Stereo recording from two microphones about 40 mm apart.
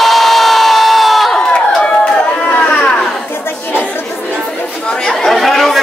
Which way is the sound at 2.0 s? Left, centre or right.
Left.